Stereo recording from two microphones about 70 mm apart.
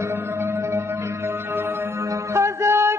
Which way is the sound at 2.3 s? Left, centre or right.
Right.